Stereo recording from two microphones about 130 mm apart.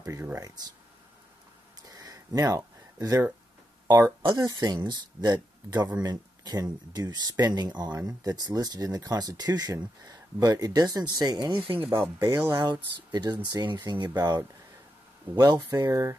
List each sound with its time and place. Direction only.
0.0 s speech: 20° right (ahead or behind)
1.8 s a sound: 30° right (ahead or behind)
3.8 s speech: 25° right (ahead or behind)
11.8 s speech: 20° right (ahead or behind)